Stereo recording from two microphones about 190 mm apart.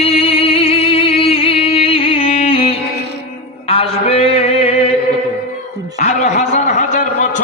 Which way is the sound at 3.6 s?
30° left (ahead or behind).